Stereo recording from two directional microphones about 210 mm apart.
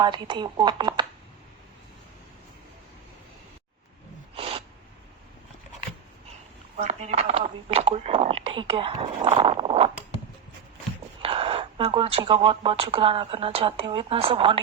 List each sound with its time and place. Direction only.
0.0 s speech: 20° right (ahead or behind)
4.4 s a sound: 25° right (ahead or behind)
6.7 s speech: 35° right (ahead or behind)
11.2 s speech: 25° right (ahead or behind)